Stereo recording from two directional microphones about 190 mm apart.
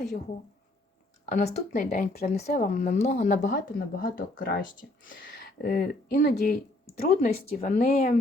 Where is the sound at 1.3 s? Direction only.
40° left (ahead or behind).